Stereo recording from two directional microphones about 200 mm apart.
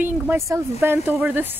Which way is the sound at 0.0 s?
10° right (ahead or behind).